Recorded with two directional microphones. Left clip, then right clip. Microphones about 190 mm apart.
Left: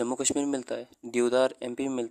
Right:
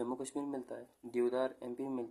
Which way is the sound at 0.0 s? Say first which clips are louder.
Left 11 dB; 40° left (ahead or behind).